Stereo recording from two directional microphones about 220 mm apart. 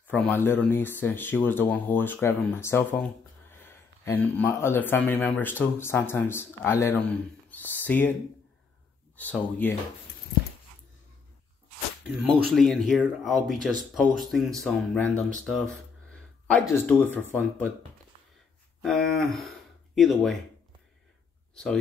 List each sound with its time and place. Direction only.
0.0 s speech: 10° left (ahead or behind)
12.5 s speech: centre (ahead or behind)
18.8 s speech: centre (ahead or behind)